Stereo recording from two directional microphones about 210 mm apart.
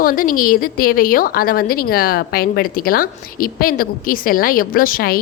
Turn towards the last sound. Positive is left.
turn(degrees=45)  # may be behind; listen again after turning